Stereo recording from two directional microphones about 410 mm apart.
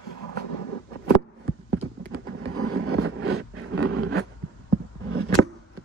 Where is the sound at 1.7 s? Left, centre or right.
Right.